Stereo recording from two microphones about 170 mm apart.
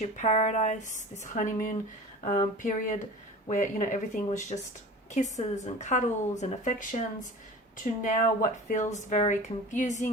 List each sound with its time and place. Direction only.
0.0 s speech: 45° left (ahead or behind)
8.0 s speech: 50° left (ahead or behind)